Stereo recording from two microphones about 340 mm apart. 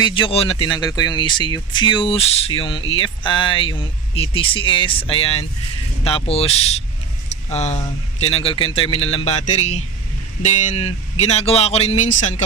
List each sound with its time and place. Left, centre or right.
0.0 s speech: centre